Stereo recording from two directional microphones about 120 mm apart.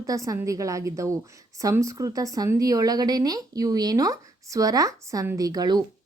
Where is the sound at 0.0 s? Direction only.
30° right (ahead or behind).